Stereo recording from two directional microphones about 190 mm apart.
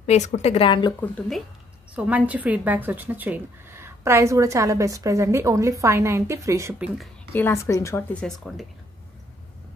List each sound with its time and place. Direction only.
0.0 s a woman's voice: 35° left (ahead or behind)
1.0 s speech: 5° left (ahead or behind)
2.0 s speech: 5° right (ahead or behind)
7.0 s a woman's voice: 10° left (ahead or behind)